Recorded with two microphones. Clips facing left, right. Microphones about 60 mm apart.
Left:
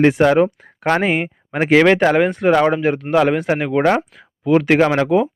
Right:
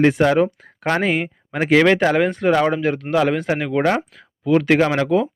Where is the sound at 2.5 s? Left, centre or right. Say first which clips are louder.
Left 3 dB; left.